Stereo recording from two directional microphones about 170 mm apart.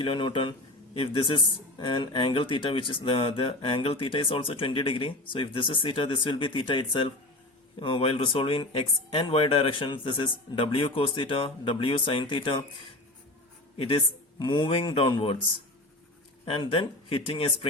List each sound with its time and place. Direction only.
0.0 s speech: 30° left (ahead or behind)
13.7 s speech: 30° left (ahead or behind)
16.5 s speech: 30° left (ahead or behind)